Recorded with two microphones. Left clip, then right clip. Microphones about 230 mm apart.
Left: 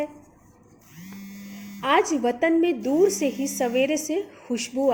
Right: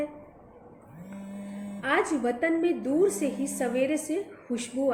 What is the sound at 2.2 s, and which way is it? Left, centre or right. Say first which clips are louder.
A woman's voice: left 5 dB; left.